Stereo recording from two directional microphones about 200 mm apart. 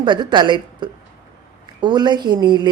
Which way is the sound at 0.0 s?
20° right (ahead or behind).